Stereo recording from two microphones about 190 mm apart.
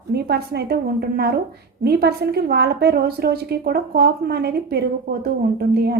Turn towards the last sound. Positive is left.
turn(degrees=-55)  # may be behind; listen again after turning